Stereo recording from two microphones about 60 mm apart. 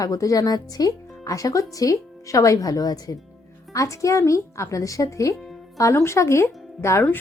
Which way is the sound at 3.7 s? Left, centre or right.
Left.